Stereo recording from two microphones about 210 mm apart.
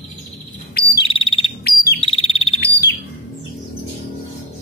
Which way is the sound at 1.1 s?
25° left (ahead or behind).